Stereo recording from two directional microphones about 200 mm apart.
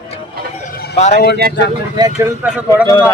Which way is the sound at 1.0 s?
35° left (ahead or behind).